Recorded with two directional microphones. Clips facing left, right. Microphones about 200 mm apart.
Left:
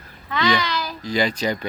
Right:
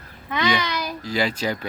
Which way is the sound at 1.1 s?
5° right (ahead or behind).